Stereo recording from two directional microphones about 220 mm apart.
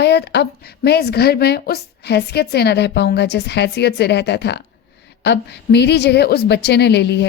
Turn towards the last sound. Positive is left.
turn(degrees=50)  # may be behind; listen again after turning